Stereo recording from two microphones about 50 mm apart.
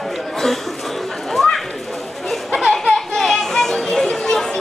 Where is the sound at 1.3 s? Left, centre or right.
Centre.